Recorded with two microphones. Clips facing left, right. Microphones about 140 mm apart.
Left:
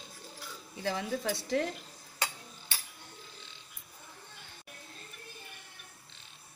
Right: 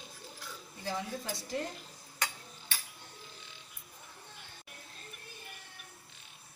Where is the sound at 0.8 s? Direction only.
80° left.